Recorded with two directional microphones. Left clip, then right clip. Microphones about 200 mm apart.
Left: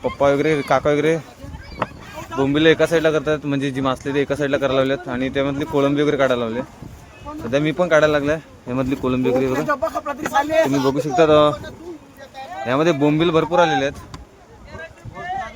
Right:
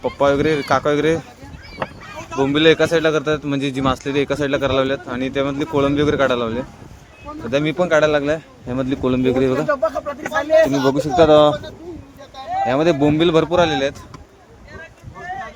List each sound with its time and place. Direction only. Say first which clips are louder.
0.0 s speech: right 1 dB; 10° right (ahead or behind)
2.4 s speech: right 1 dB; 10° right (ahead or behind)
9.6 s speech: right 2 dB; 60° left (ahead or behind)
10.8 s speech: right 2 dB; 5° right (ahead or behind)
12.6 s speech: right 1 dB; centre (ahead or behind)